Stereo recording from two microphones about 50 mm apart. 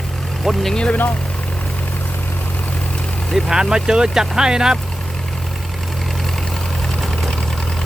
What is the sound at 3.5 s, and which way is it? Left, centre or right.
Speech, centre.